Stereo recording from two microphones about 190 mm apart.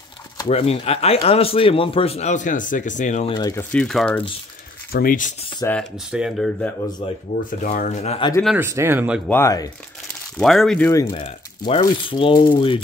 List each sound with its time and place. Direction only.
0.5 s a man's voice: 30° left (ahead or behind)
3.3 s speech: 20° left (ahead or behind)
3.7 s speech: 5° left (ahead or behind)
4.9 s speech: 45° left (ahead or behind)
5.7 s speech: centre (ahead or behind)
7.0 s a man's voice: 30° left (ahead or behind)
7.6 s a man's voice: 45° left (ahead or behind)
8.5 s speech: 15° right (ahead or behind)
9.3 s speech: 15° left (ahead or behind)
10.3 s speech: centre (ahead or behind)
10.9 s speech: 15° left (ahead or behind)
11.1 s speech: 30° left (ahead or behind)